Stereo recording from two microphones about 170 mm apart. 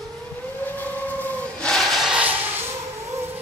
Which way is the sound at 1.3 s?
5° left (ahead or behind).